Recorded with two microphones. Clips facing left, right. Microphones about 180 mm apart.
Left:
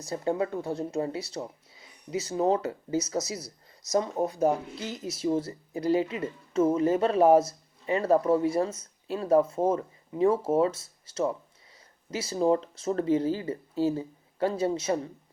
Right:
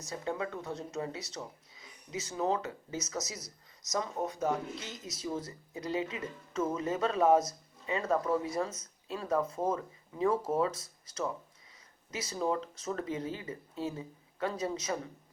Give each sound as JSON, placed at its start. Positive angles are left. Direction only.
{"t": 0.0, "sound": "speech", "side_deg": 35}